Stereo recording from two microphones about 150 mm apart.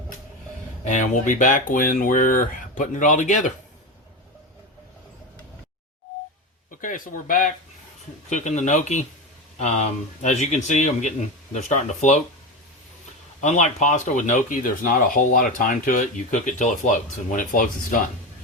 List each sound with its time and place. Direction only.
0.9 s speech: 55° left (ahead or behind)
6.7 s a sound: 65° left (ahead or behind)
8.3 s a man's voice: 55° left (ahead or behind)
13.4 s speech: 55° left (ahead or behind)